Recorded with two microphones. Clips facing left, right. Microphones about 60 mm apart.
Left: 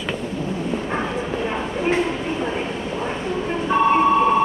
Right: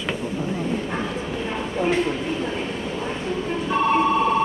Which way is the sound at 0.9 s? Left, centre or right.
Left.